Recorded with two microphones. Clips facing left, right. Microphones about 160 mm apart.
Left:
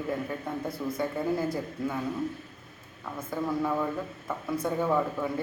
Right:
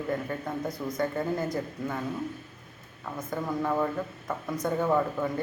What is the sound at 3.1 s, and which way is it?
A man's voice, centre (ahead or behind).